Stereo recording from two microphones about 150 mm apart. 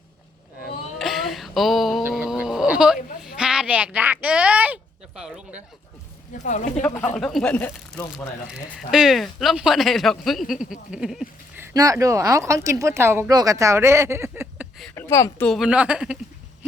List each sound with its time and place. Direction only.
0.9 s a sound: centre (ahead or behind)
6.4 s speech: 55° left (ahead or behind)
6.8 s speech: 10° left (ahead or behind)
8.9 s speech: centre (ahead or behind)
11.6 s speech: 20° right (ahead or behind)
14.9 s a woman's voice: 15° left (ahead or behind)
15.4 s a woman's voice: centre (ahead or behind)